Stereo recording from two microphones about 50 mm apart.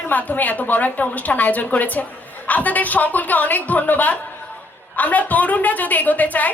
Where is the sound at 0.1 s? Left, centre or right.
Left.